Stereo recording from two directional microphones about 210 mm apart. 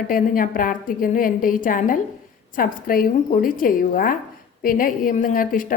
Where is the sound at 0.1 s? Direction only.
40° left (ahead or behind).